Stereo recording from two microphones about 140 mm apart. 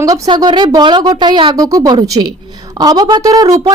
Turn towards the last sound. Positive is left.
turn(degrees=-25)  # may be behind; listen again after turning